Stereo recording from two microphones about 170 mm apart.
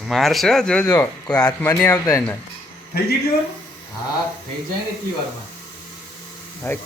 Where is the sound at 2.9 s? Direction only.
65° left (ahead or behind).